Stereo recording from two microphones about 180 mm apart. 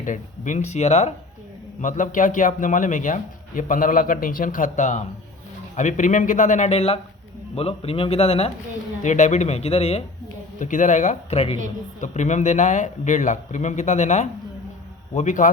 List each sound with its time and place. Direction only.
0.0 s a man's voice: 45° left (ahead or behind)